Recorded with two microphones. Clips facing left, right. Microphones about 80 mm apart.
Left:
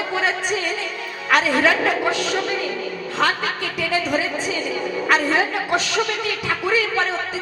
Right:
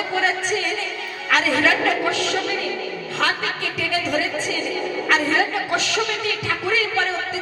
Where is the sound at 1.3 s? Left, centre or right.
Left.